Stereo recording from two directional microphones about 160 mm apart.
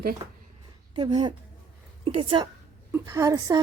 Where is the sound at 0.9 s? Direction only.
30° right (ahead or behind).